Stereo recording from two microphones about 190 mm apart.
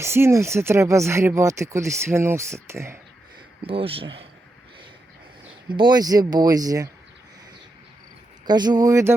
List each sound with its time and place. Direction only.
0.0 s speech: 15° right (ahead or behind)
3.6 s speech: 30° right (ahead or behind)
5.6 s speech: 25° right (ahead or behind)
8.4 s speech: 20° right (ahead or behind)